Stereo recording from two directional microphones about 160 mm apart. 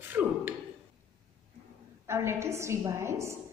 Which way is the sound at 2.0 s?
15° right (ahead or behind).